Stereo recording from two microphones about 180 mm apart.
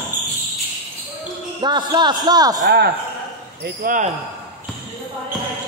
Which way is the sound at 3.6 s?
50° right (ahead or behind).